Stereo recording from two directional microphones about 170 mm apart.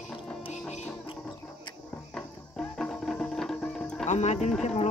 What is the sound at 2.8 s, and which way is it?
Music, centre (ahead or behind).